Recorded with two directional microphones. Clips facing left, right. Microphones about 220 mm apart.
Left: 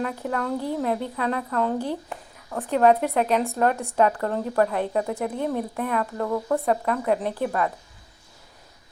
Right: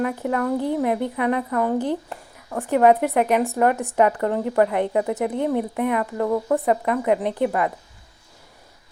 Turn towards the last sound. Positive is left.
turn(degrees=-15)  # may be behind; listen again after turning